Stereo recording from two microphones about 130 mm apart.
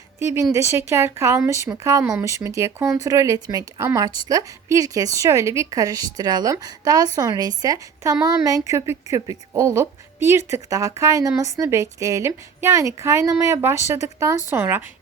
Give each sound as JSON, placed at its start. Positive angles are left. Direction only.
{"t": 0.5, "sound": "a woman's voice", "side_deg": -20}